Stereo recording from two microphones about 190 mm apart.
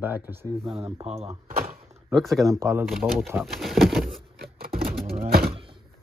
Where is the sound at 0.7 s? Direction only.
30° right (ahead or behind).